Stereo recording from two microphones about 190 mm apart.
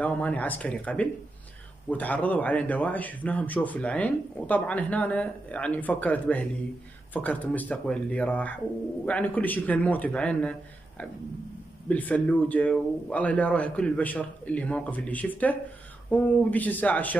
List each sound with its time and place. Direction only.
0.0 s a man's voice: 10° left (ahead or behind)
11.9 s a man's voice: 10° left (ahead or behind)